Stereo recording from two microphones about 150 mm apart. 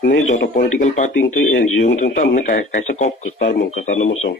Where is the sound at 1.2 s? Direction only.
90° left.